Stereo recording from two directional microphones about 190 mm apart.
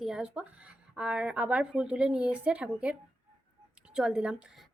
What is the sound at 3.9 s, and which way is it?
Speech, 5° right (ahead or behind).